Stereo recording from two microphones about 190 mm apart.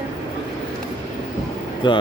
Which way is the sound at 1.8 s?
25° left (ahead or behind).